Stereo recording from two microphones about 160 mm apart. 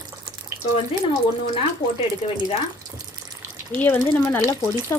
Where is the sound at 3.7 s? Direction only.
10° left (ahead or behind).